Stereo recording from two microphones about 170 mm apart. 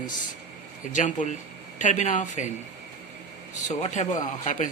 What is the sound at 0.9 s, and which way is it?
Speech, 45° left (ahead or behind).